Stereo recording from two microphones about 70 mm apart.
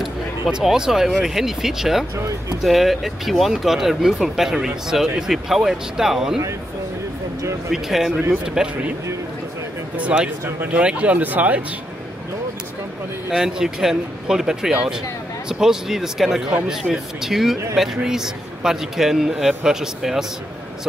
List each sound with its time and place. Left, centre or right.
0.0 s a man's voice: centre
7.7 s a man's voice: centre
9.9 s a man's voice: centre
13.3 s a man's voice: centre